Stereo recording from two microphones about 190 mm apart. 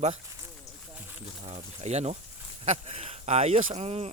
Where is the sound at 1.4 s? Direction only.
35° right (ahead or behind).